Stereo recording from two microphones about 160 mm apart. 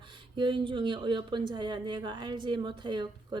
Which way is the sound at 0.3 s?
30° right (ahead or behind).